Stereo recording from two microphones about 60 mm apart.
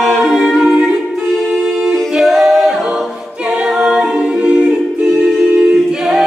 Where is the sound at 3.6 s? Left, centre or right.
Centre.